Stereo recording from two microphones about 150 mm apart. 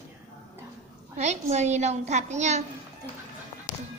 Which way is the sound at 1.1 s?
50° right (ahead or behind).